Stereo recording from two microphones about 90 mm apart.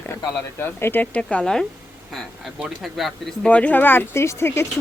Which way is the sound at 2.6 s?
Centre (ahead or behind).